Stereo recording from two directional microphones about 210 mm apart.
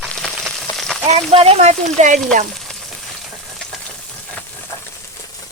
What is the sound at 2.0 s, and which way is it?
Frying, 35° right (ahead or behind).